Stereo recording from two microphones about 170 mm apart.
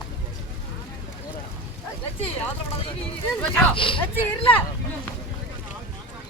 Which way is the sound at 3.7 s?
30° left (ahead or behind).